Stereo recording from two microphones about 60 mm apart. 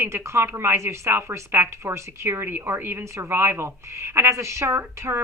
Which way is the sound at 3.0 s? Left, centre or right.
Right.